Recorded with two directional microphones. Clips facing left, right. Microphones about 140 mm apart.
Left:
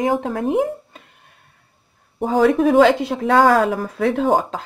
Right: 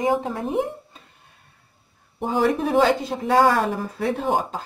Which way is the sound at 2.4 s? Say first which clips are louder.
Left 6 dB; 90° left.